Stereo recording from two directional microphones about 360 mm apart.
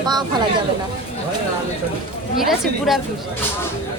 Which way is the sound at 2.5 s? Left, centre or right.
Centre.